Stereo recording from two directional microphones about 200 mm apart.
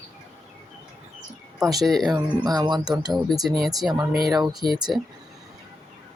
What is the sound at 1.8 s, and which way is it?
Speech, centre (ahead or behind).